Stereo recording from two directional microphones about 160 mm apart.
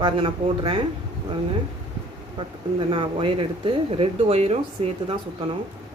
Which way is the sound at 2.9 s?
35° right (ahead or behind).